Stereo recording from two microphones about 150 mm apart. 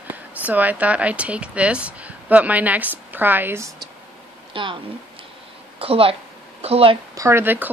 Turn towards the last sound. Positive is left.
turn(degrees=-10)  # may be behind; listen again after turning